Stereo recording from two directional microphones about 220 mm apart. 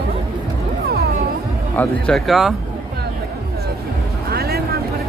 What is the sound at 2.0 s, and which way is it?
Speech, centre (ahead or behind).